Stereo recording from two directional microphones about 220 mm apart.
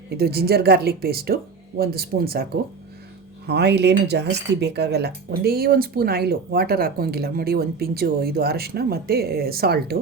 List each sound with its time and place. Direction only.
0.2 s speech: 45° right (ahead or behind)